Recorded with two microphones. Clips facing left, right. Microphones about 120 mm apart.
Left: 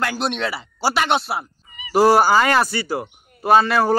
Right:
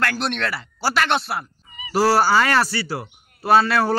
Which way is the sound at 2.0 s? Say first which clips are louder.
Left 3 dB; 15° left (ahead or behind).